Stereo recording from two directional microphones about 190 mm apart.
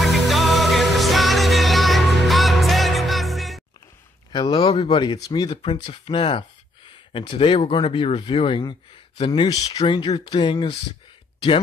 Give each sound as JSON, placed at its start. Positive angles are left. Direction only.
{"t": 0.0, "sound": "music", "side_deg": 0}
{"t": 4.3, "sound": "speech", "side_deg": 25}